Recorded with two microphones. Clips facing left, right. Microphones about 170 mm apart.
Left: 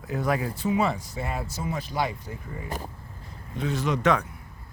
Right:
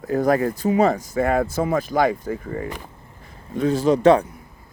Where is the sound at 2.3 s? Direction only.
65° right (ahead or behind).